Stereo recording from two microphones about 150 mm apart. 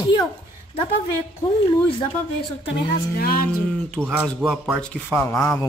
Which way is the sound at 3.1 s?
75° left (ahead or behind).